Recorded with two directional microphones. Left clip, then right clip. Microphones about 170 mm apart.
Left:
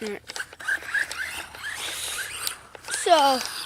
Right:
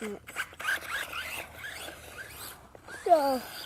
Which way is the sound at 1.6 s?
50° right (ahead or behind).